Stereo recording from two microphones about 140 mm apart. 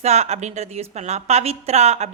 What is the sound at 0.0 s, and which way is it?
A woman's voice, 50° right (ahead or behind).